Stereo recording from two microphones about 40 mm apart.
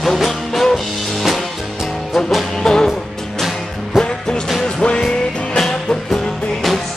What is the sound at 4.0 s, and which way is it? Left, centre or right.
Music, centre.